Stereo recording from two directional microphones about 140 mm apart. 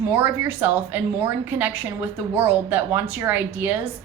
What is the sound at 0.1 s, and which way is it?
A woman's voice, 15° right (ahead or behind).